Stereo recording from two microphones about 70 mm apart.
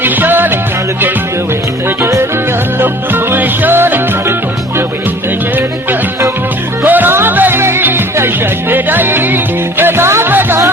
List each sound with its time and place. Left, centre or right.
0.0 s music: right
2.8 s music: right
6.8 s music: right